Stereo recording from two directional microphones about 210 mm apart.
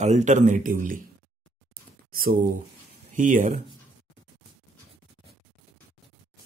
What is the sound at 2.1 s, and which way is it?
Speech, 40° right (ahead or behind).